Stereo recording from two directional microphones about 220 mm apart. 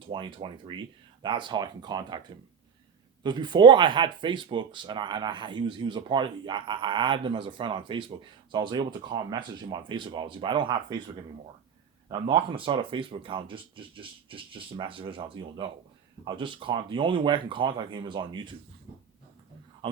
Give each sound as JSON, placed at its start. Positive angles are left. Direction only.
{"t": 0.1, "sound": "speech", "side_deg": -20}
{"t": 3.2, "sound": "speech", "side_deg": -20}
{"t": 12.1, "sound": "speech", "side_deg": -25}
{"t": 19.8, "sound": "speech", "side_deg": -20}